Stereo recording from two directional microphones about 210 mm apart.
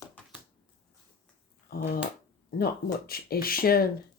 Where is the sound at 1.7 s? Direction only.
45° left (ahead or behind).